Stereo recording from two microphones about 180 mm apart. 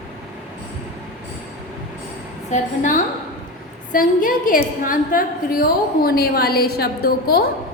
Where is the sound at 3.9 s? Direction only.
50° left (ahead or behind).